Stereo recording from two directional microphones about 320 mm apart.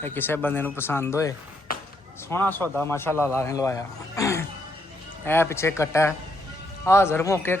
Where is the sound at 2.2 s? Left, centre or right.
Centre.